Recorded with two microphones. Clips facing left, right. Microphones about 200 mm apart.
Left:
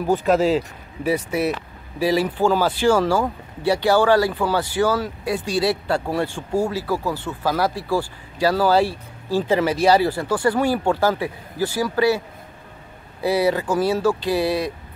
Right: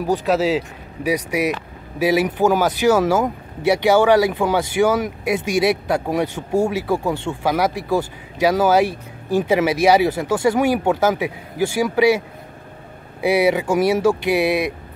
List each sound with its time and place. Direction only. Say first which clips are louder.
0.0 s speech: even; centre (ahead or behind)
13.2 s speech: right 3 dB; 15° right (ahead or behind)